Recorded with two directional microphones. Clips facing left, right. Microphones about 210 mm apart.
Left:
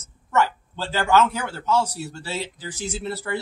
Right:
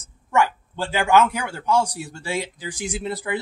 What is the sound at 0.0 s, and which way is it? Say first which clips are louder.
A man's voice: right 1 dB; 15° right (ahead or behind).